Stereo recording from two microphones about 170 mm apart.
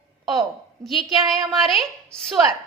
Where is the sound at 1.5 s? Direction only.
Centre (ahead or behind).